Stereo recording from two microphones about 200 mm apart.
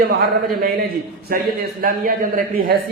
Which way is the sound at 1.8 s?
45° right (ahead or behind).